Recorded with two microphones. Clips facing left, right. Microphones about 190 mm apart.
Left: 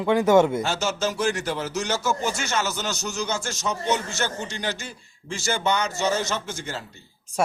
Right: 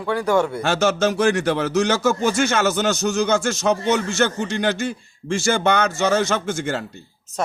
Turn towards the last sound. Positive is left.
turn(degrees=-55)  # may be behind; listen again after turning